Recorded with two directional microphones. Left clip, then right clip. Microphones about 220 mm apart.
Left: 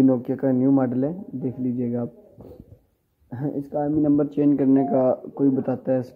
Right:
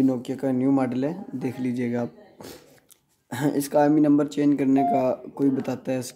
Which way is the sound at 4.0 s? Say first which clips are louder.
Even; 5° right (ahead or behind).